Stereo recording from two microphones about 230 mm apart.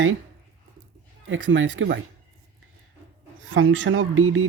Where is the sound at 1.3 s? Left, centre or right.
Right.